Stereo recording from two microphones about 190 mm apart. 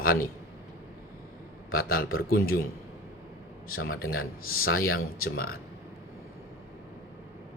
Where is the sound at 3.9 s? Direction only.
50° left (ahead or behind).